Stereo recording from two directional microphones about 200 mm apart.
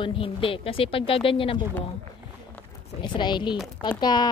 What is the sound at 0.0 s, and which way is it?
Speech, 25° left (ahead or behind).